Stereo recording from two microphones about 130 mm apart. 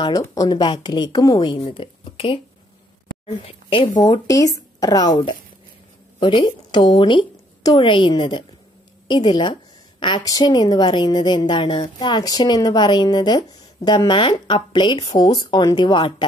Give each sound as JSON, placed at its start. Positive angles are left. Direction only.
{"t": 0.0, "sound": "a woman's voice", "side_deg": 30}
{"t": 4.0, "sound": "a woman's voice", "side_deg": 30}